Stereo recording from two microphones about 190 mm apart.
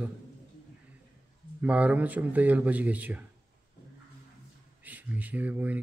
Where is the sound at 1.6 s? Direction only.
5° right (ahead or behind).